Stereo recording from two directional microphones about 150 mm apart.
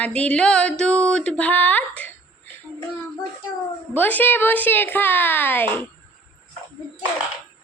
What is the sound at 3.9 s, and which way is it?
A woman's voice, 10° left (ahead or behind).